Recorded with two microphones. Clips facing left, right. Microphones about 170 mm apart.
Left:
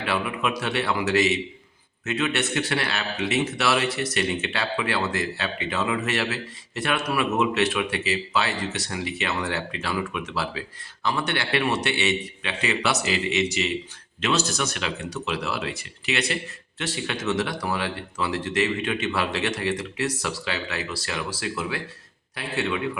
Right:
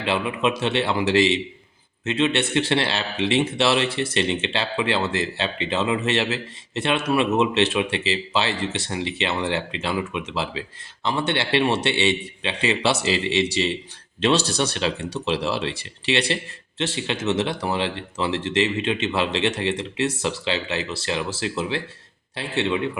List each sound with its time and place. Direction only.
0.0 s a man's voice: 25° right (ahead or behind)